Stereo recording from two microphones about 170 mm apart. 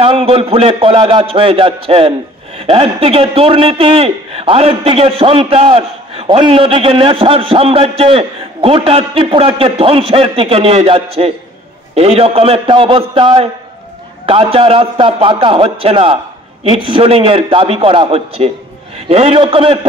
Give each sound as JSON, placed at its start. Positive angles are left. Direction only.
{"t": 0.0, "sound": "a man's voice", "side_deg": -35}